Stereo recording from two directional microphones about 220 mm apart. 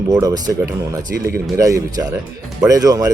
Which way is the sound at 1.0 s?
45° right (ahead or behind).